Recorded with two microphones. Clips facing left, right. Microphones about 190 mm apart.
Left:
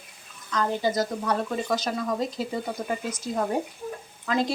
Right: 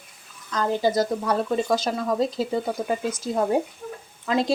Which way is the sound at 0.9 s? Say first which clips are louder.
Right 3 dB; 30° right (ahead or behind).